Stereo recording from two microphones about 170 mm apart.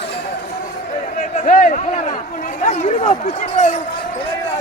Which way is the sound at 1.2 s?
55° left (ahead or behind).